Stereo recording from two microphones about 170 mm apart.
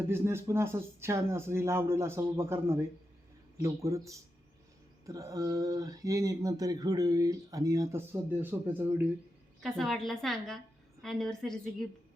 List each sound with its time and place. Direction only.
0.1 s speech: 15° right (ahead or behind)
9.6 s a woman's voice: centre (ahead or behind)